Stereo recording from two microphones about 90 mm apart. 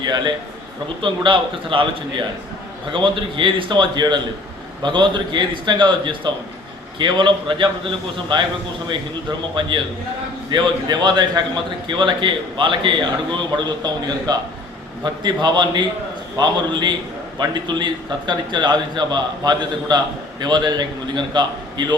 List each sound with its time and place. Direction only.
0.0 s a man's voice: 55° right (ahead or behind)
1.0 s a man's voice: 70° right (ahead or behind)
2.9 s a man's voice: 65° right (ahead or behind)
9.6 s a man's voice: 65° right (ahead or behind)
13.8 s a man's voice: 50° right (ahead or behind)
17.4 s a man's voice: 55° right (ahead or behind)